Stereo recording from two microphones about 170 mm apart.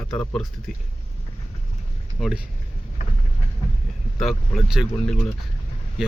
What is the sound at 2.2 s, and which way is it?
Speech, centre (ahead or behind).